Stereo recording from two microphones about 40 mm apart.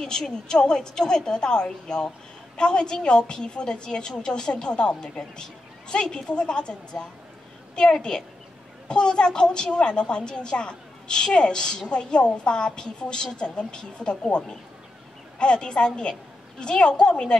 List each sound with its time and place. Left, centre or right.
0.5 s a woman's voice: centre